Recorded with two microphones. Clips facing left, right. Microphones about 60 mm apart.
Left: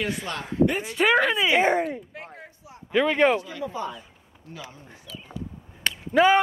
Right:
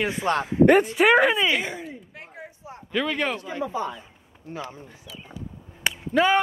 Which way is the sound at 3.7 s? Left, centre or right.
Centre.